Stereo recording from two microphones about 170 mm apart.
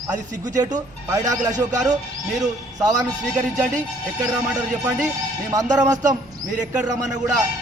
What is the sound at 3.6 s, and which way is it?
Speech, 45° right (ahead or behind).